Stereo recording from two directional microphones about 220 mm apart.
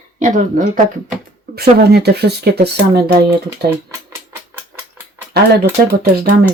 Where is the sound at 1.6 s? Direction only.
45° right (ahead or behind).